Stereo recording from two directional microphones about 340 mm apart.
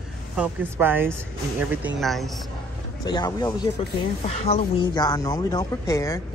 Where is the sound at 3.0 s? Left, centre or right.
Centre.